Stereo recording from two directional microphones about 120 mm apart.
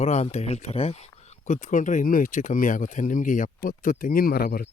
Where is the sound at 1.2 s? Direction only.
80° left.